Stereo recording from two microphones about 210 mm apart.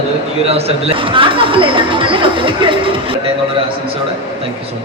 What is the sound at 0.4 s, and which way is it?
Speech, 30° right (ahead or behind).